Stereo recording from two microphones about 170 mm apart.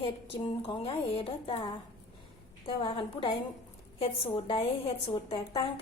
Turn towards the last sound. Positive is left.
turn(degrees=35)  # may be behind; listen again after turning